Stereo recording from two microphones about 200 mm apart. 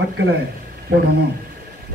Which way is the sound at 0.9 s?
50° right (ahead or behind).